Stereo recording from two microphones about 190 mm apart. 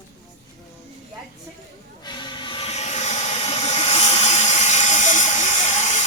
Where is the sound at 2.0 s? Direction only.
25° left (ahead or behind).